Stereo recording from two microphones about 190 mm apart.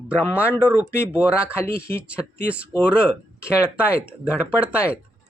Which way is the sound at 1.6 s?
15° left (ahead or behind).